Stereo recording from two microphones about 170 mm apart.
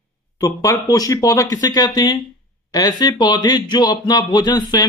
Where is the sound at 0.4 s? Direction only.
20° left (ahead or behind).